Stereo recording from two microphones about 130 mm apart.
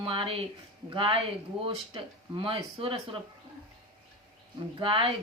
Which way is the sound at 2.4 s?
45° right (ahead or behind).